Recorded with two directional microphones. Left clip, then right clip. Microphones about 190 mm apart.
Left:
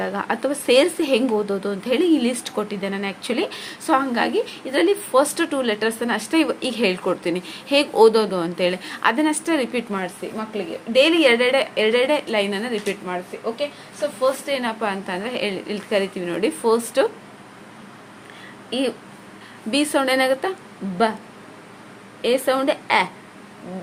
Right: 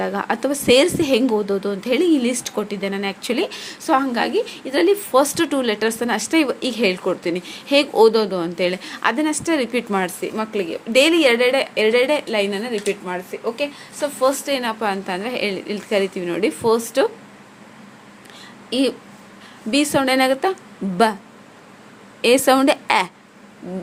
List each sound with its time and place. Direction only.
0.0 s a woman's voice: 20° right (ahead or behind)
9.9 s a woman's voice: 35° right (ahead or behind); by 13.0 s 10° right (ahead or behind)
13.1 s a woman's voice: 25° right (ahead or behind)
13.6 s a woman's voice: 35° right (ahead or behind); by 17.1 s 20° right (ahead or behind)
18.7 s a woman's voice: 25° right (ahead or behind)
22.2 s a woman's voice: 30° right (ahead or behind)